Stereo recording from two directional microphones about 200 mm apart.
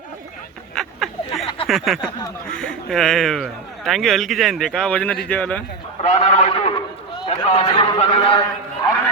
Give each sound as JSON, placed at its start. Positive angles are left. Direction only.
{"t": 0.8, "sound": "a sound", "side_deg": 0}
{"t": 2.5, "sound": "speech", "side_deg": 5}
{"t": 6.0, "sound": "a man's voice", "side_deg": 35}